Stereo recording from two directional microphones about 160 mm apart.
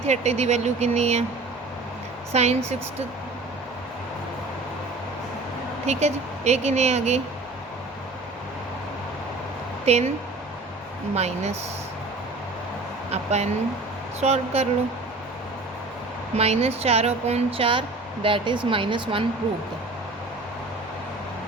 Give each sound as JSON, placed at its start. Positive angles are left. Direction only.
{"t": 0.1, "sound": "speech", "side_deg": -45}
{"t": 2.3, "sound": "speech", "side_deg": -45}
{"t": 5.8, "sound": "speech", "side_deg": -45}
{"t": 9.8, "sound": "speech", "side_deg": -40}
{"t": 11.1, "sound": "speech", "side_deg": -40}
{"t": 13.1, "sound": "speech", "side_deg": -45}
{"t": 16.4, "sound": "speech", "side_deg": -40}